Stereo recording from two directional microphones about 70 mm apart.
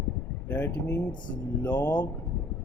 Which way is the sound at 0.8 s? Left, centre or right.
Left.